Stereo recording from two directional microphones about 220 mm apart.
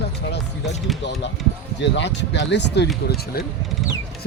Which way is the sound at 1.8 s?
55° left (ahead or behind).